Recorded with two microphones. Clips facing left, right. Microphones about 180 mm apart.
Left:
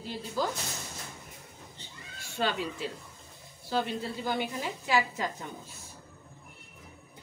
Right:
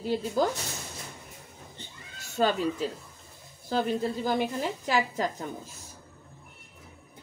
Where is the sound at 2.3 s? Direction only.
40° right (ahead or behind).